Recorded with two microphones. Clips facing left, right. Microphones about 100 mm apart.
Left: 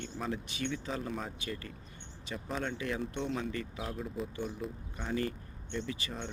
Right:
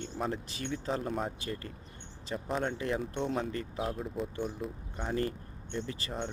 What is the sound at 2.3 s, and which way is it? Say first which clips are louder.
Speech: right 4 dB; 25° right (ahead or behind).